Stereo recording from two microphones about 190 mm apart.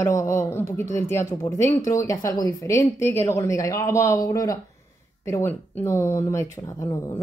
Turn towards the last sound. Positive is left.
turn(degrees=15)  # may be behind; listen again after turning